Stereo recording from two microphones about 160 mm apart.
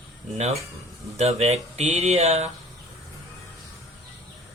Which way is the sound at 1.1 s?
40° right (ahead or behind).